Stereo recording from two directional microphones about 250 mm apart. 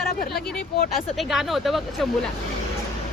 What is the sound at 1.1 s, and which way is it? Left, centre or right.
Speech, centre.